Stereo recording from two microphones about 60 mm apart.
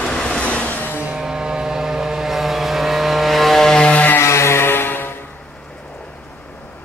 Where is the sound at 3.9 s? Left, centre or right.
Left.